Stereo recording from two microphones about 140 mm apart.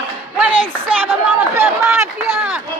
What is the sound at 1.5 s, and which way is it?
A man's voice, 15° right (ahead or behind).